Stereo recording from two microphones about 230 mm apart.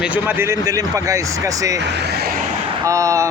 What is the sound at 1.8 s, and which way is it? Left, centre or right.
Speech, right.